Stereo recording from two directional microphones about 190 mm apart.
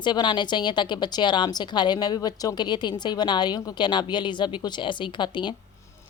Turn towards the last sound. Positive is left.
turn(degrees=25)  # may be behind; listen again after turning